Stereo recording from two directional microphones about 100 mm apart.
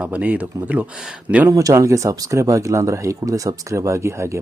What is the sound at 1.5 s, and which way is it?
Speech, 35° right (ahead or behind).